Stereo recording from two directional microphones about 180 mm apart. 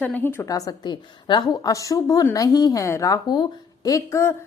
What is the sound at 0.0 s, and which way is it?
A woman's voice, 10° left (ahead or behind).